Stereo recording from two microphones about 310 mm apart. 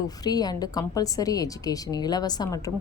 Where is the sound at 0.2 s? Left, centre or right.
Centre.